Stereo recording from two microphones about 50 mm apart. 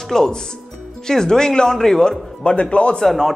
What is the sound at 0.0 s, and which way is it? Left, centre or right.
A man's voice, centre.